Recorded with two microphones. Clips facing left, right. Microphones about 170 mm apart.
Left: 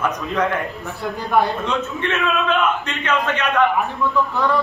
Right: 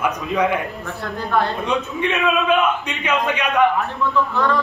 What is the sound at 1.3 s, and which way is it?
Speech, 15° left (ahead or behind).